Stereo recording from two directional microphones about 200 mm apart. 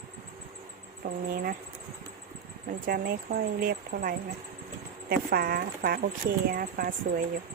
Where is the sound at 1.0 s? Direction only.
45° right (ahead or behind).